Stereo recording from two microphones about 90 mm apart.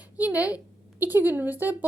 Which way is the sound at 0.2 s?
15° right (ahead or behind).